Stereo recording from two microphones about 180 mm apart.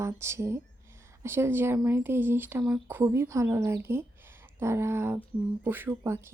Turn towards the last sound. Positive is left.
turn(degrees=-15)  # may be behind; listen again after turning